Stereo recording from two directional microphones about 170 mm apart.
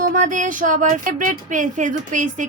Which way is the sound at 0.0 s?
50° right (ahead or behind).